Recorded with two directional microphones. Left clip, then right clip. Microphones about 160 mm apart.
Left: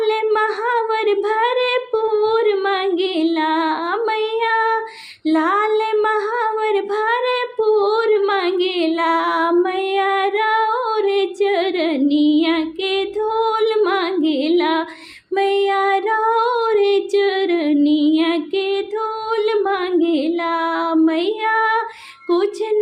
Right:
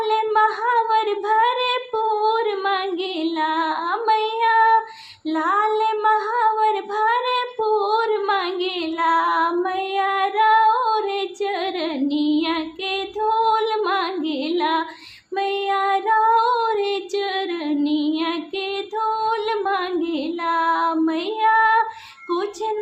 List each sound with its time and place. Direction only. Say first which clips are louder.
0.0 s child singing: left 1 dB; 30° left (ahead or behind)
5.3 s female singing: left 3 dB; 30° left (ahead or behind)
15.4 s child singing: left 5 dB; 35° left (ahead or behind)
19.3 s female singing: left 4 dB; 30° left (ahead or behind)